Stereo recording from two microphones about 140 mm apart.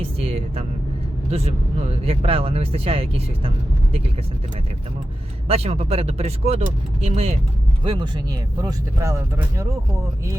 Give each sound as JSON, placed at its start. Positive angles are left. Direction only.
{"t": 0.0, "sound": "speech", "side_deg": -45}
{"t": 5.5, "sound": "speech", "side_deg": -45}
{"t": 7.9, "sound": "speech", "side_deg": -35}